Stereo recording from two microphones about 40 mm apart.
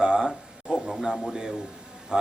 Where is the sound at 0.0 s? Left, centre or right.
Centre.